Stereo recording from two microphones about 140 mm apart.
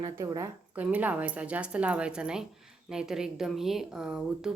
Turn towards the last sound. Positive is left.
turn(degrees=-5)  # may be behind; listen again after turning